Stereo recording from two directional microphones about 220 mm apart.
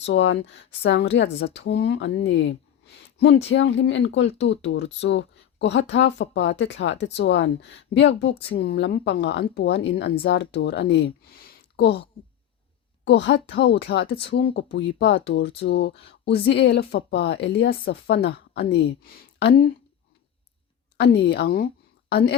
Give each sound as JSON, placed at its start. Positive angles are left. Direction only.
{"t": 0.0, "sound": "speech", "side_deg": 55}
{"t": 13.1, "sound": "speech", "side_deg": 55}
{"t": 21.0, "sound": "speech", "side_deg": 50}